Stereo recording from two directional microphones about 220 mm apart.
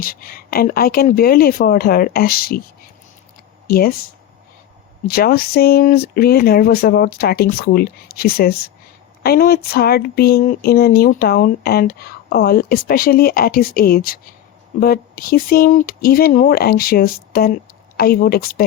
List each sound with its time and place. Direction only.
0.0 s speech: 40° left (ahead or behind)
3.7 s speech: 45° left (ahead or behind)
5.0 s speech: 45° left (ahead or behind)